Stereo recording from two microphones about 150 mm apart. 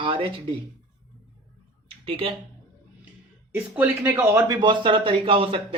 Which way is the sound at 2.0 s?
40° right (ahead or behind).